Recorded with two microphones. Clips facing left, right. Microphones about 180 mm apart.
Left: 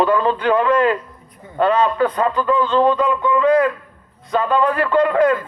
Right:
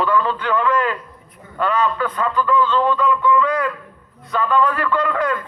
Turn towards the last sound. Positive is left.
turn(degrees=25)  # may be behind; listen again after turning